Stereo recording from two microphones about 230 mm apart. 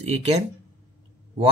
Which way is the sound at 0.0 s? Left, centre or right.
Right.